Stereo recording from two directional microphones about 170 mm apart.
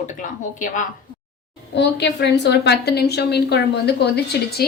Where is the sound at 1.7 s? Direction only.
90° left.